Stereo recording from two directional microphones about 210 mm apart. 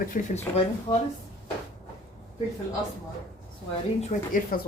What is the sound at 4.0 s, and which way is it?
Speech, 40° left (ahead or behind).